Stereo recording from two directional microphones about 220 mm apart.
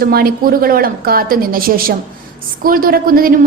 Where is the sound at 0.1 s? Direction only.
45° right (ahead or behind).